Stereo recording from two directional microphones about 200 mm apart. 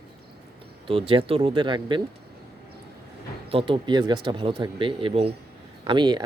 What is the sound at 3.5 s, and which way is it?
Speech, 25° right (ahead or behind).